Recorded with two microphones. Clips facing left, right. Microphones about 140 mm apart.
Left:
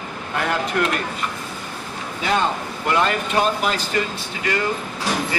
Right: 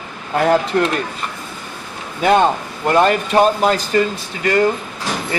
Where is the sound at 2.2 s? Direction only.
50° right (ahead or behind).